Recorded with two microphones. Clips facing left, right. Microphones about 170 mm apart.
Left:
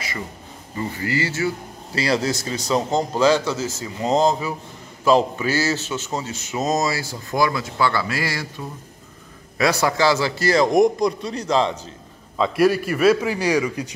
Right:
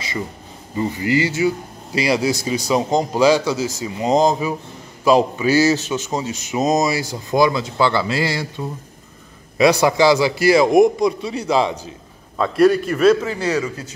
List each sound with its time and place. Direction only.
0.7 s speech: 20° right (ahead or behind)
12.5 s a man's voice: 5° left (ahead or behind)